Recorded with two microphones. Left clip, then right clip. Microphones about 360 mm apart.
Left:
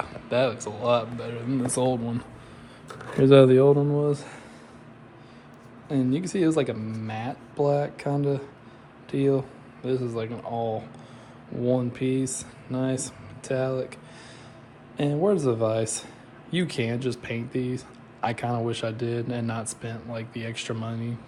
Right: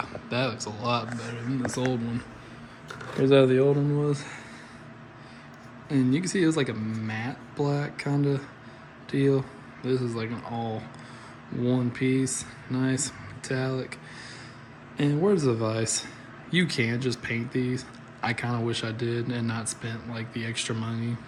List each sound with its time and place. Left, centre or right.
0.3 s speech: centre
1.7 s speech: centre
3.0 s speech: centre
4.0 s speech: centre
5.9 s speech: centre